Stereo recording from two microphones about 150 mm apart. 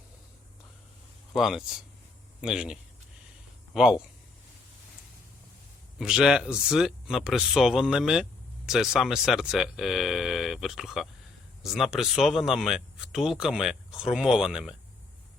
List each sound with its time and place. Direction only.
1.3 s speech: centre (ahead or behind)
3.8 s speech: 5° right (ahead or behind)
6.0 s speech: 5° right (ahead or behind)